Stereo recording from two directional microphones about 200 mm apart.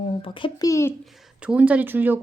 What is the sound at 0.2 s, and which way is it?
Speech, 25° left (ahead or behind).